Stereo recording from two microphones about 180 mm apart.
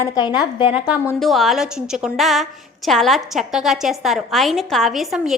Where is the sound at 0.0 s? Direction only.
20° left (ahead or behind).